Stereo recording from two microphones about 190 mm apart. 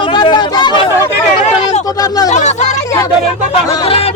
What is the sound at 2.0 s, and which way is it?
Speech, 20° left (ahead or behind).